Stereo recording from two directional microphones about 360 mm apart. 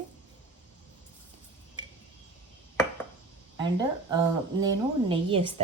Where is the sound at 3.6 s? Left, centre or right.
Centre.